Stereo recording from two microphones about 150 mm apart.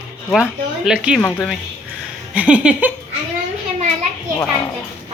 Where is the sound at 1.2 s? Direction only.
10° left (ahead or behind).